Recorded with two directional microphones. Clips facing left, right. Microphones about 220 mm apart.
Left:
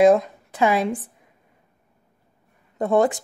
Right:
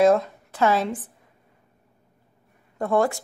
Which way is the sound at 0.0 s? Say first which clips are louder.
Left 3 dB; 15° left (ahead or behind).